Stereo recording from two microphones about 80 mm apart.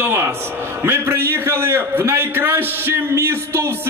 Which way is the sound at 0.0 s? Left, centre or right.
Right.